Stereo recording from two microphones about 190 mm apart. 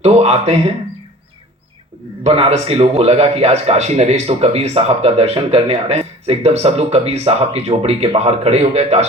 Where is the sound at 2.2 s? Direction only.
30° right (ahead or behind).